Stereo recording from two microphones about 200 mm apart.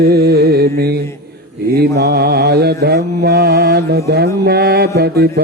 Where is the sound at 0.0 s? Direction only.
50° right (ahead or behind).